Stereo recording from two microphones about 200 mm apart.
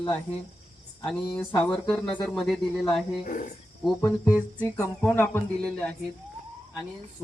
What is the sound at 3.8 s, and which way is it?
Speech, centre (ahead or behind).